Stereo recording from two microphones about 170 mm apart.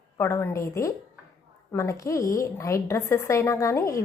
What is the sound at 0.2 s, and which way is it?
A woman's voice, 15° left (ahead or behind).